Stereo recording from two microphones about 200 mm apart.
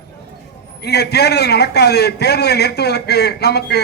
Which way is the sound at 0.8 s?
55° left (ahead or behind).